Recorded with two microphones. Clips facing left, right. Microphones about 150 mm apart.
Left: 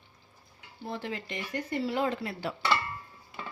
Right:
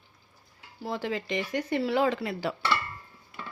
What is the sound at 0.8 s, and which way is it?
Speech, 90° right.